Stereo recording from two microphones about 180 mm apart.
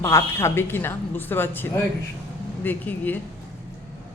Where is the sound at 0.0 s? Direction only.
15° left (ahead or behind).